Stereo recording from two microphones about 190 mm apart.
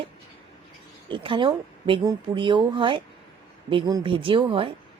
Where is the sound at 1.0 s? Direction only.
25° right (ahead or behind).